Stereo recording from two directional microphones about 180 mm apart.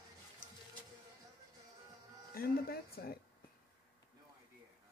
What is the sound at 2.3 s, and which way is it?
Speech, 55° left (ahead or behind).